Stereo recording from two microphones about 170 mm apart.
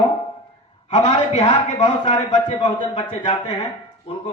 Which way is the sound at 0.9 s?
45° left (ahead or behind).